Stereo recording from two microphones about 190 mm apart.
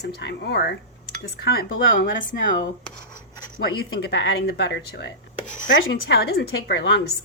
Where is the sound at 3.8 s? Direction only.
65° left (ahead or behind).